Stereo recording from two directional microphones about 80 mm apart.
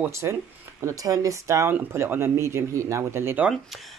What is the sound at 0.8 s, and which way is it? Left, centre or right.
Speech, right.